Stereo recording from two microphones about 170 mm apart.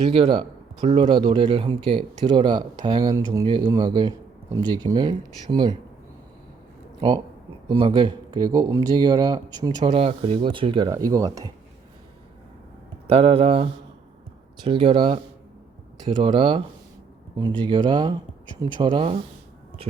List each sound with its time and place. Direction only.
0.1 s a man's voice: 30° right (ahead or behind)
7.7 s a man's voice: 30° right (ahead or behind)
13.1 s a man's voice: 35° right (ahead or behind)